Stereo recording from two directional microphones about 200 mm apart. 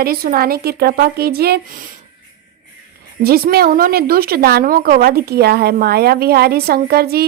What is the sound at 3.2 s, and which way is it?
A woman's voice, 50° right (ahead or behind).